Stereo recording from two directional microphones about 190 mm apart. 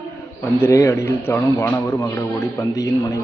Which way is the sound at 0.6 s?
15° left (ahead or behind).